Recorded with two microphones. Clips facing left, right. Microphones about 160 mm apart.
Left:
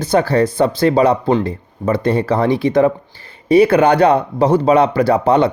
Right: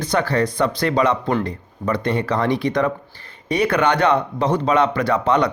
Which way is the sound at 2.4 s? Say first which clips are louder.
Left 5 dB; 5° left (ahead or behind).